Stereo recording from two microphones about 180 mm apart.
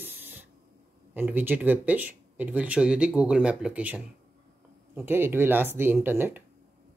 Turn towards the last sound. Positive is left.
turn(degrees=-10)  # may be behind; listen again after turning